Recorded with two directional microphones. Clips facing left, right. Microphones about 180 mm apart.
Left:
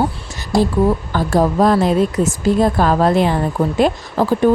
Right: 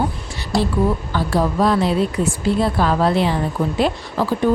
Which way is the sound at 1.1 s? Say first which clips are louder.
Left 4 dB; 45° left (ahead or behind).